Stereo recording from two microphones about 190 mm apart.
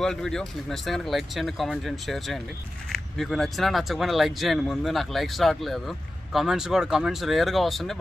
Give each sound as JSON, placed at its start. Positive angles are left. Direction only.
{"t": 0.0, "sound": "speech", "side_deg": 0}